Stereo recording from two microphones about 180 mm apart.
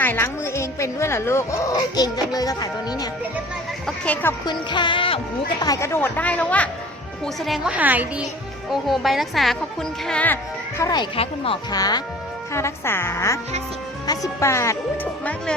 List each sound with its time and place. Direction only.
0.0 s a woman's voice: 10° left (ahead or behind)
3.8 s a woman's voice: 5° left (ahead or behind)
4.7 s a woman's voice: 25° left (ahead or behind); by 6.7 s 10° left (ahead or behind)
7.4 s a woman's voice: 5° right (ahead or behind)
10.8 s a woman's voice: 20° left (ahead or behind)